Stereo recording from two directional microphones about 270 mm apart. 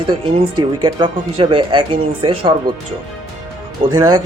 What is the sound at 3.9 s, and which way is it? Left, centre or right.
Speech, centre.